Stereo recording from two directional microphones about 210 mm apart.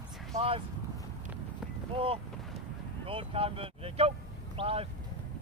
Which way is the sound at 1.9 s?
25° right (ahead or behind).